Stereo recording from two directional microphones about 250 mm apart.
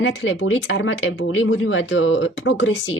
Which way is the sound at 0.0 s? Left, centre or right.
Left.